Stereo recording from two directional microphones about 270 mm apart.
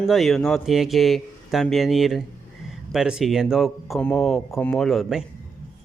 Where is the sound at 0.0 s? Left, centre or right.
Centre.